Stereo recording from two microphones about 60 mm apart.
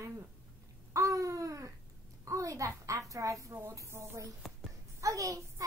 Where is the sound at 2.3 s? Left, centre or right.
Right.